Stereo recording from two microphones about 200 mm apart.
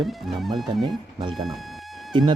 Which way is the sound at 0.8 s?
20° right (ahead or behind).